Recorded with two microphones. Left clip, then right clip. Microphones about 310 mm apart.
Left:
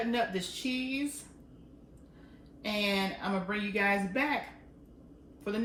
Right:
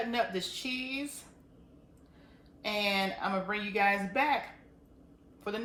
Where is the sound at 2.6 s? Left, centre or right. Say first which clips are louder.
Right 1 dB; centre.